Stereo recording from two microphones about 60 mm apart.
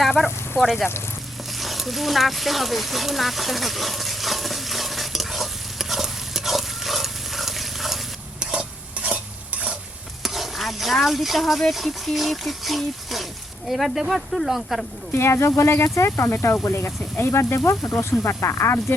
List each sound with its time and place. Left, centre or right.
0.0 s sizzle: centre
1.5 s a sound: centre
8.4 s stir: centre
10.2 s stir: centre
13.7 s speech: centre
15.1 s speech: left